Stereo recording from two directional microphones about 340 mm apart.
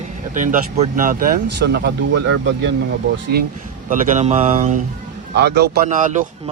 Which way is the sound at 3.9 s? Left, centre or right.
Right.